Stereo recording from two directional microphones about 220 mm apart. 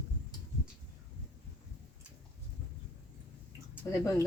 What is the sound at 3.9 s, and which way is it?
Speech, 15° left (ahead or behind).